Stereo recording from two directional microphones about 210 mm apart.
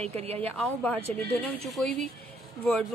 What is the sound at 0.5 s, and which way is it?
A woman's voice, 5° left (ahead or behind).